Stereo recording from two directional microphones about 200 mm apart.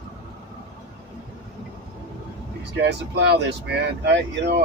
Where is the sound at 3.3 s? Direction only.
60° right (ahead or behind).